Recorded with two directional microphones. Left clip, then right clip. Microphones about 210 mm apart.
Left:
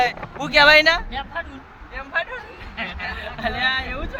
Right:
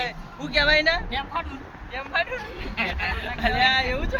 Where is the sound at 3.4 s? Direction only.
10° left (ahead or behind).